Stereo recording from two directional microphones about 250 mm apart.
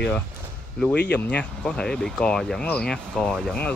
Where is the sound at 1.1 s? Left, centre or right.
Centre.